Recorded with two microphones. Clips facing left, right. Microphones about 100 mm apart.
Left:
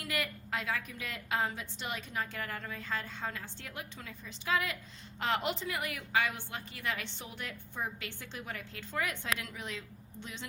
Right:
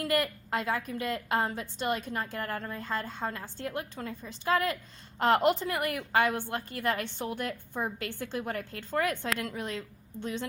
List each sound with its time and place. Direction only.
0.0 s a woman's voice: 45° right (ahead or behind)